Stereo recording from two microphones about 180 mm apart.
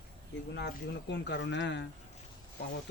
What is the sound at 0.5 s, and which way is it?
Speech, 75° left (ahead or behind).